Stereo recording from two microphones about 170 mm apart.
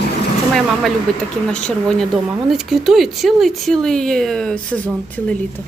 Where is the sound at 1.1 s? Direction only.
Centre (ahead or behind).